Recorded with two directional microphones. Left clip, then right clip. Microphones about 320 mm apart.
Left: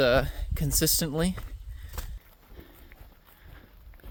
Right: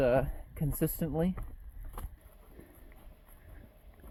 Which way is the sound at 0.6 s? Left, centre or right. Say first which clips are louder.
Left 6 dB; left.